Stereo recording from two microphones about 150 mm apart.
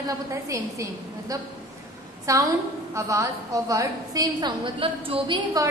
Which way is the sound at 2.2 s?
20° right (ahead or behind).